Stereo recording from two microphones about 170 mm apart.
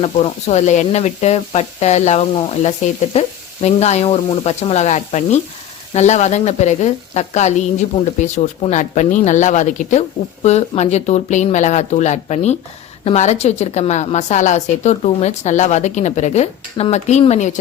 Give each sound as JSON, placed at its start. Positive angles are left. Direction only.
{"t": 0.0, "sound": "a woman's voice", "side_deg": 40}